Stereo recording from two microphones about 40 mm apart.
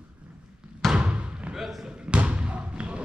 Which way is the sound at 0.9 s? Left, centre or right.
Right.